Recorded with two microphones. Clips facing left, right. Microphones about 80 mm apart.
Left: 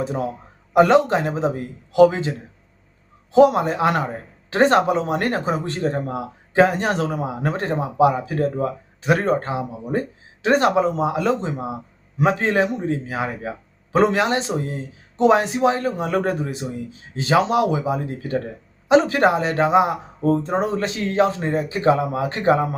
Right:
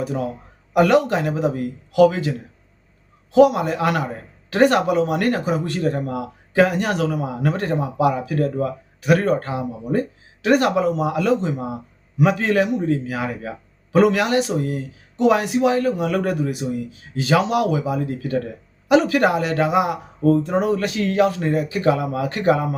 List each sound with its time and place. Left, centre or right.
0.0 s speech: left
3.3 s speech: left